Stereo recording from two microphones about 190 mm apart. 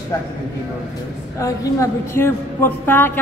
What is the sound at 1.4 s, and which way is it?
A woman's voice, 15° left (ahead or behind).